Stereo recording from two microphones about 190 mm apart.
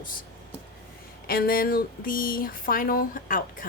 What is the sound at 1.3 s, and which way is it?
A woman's voice, 50° left (ahead or behind).